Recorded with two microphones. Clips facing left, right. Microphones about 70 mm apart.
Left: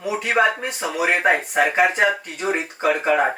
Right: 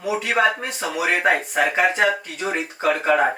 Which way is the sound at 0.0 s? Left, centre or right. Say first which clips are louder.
Left 1 dB; centre.